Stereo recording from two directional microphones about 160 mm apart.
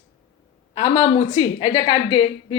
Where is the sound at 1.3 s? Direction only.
30° left (ahead or behind).